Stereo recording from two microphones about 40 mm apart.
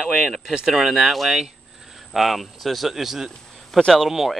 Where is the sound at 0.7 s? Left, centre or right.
Centre.